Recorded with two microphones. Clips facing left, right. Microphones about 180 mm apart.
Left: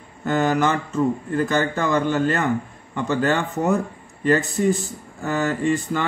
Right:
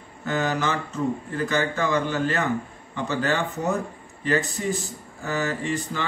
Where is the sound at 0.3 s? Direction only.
50° left (ahead or behind).